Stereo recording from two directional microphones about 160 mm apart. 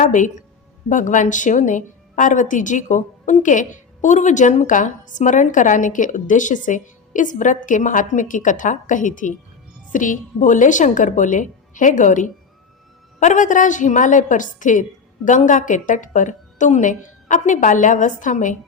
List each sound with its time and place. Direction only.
0.0 s a woman's voice: 50° left (ahead or behind)